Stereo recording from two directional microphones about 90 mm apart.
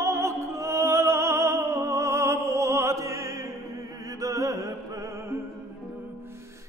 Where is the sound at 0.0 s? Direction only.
35° right (ahead or behind).